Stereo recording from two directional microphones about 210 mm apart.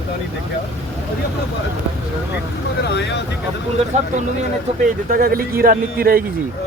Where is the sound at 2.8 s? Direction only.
55° left (ahead or behind).